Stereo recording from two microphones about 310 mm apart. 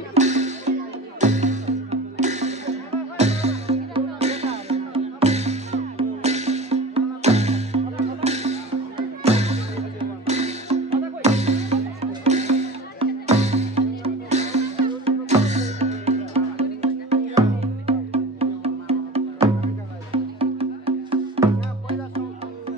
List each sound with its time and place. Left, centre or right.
0.1 s music: right